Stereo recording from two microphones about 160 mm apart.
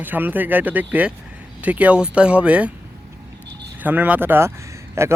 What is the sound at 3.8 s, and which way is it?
Speech, 10° right (ahead or behind).